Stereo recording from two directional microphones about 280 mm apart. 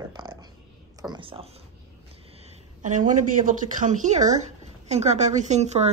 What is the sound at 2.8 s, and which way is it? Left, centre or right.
A woman's voice, right.